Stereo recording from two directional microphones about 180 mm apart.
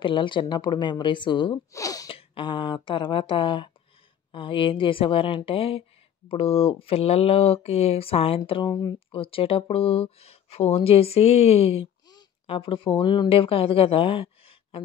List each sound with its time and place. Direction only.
0.0 s speech: 25° left (ahead or behind)
2.0 s speech: 30° left (ahead or behind)